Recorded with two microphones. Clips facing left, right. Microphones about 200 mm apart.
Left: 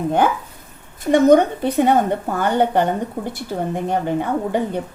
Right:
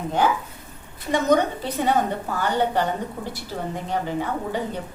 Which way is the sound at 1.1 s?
55° left (ahead or behind).